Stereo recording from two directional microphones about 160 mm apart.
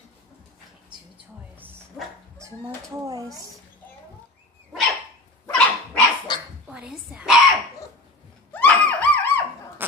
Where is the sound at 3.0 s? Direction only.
20° right (ahead or behind).